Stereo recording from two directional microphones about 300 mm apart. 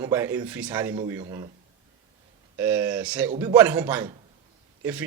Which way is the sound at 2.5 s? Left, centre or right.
Centre.